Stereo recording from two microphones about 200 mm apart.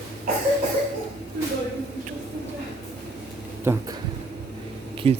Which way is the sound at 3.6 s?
10° right (ahead or behind).